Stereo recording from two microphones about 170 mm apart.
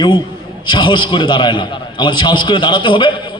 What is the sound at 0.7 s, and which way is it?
A man's voice, 30° left (ahead or behind).